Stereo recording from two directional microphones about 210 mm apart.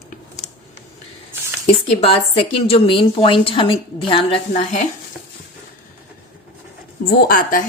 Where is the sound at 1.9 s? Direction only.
25° left (ahead or behind).